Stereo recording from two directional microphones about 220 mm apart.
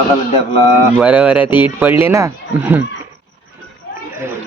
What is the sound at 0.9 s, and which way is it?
Speech, 5° right (ahead or behind).